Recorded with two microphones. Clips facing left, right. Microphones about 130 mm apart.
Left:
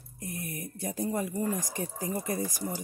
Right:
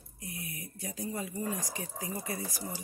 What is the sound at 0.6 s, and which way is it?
Speech, 50° left (ahead or behind).